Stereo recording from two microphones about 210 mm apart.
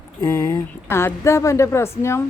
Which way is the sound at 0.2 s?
15° left (ahead or behind).